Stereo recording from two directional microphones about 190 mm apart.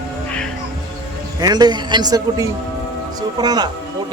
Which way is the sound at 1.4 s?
20° right (ahead or behind).